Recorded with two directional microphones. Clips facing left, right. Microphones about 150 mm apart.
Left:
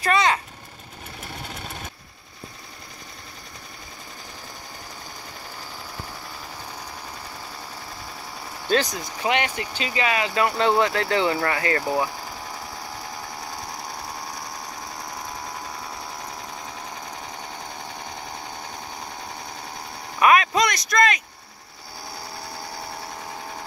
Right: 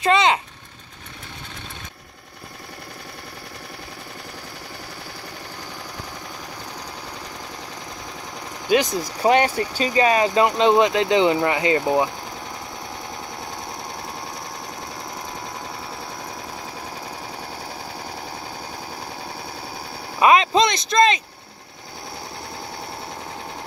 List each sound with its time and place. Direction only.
0.0 s vehicle: 20° right (ahead or behind)
8.7 s speech: 15° right (ahead or behind)
9.2 s speech: 40° right (ahead or behind)
10.4 s speech: 20° right (ahead or behind)
20.2 s a sound: 25° right (ahead or behind)